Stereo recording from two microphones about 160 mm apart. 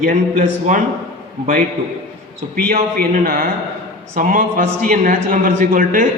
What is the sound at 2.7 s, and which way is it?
A man's voice, 65° right (ahead or behind).